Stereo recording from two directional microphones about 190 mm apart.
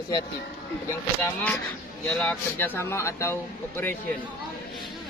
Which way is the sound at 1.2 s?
5° left (ahead or behind).